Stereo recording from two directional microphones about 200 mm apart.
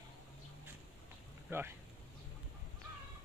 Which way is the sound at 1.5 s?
10° right (ahead or behind).